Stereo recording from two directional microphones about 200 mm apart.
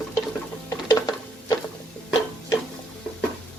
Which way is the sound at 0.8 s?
20° left (ahead or behind).